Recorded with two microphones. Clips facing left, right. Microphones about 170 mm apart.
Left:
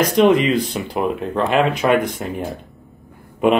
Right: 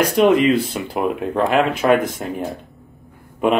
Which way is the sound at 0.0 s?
5° right (ahead or behind).